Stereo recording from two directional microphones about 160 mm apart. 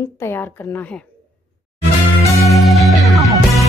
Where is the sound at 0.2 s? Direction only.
15° left (ahead or behind).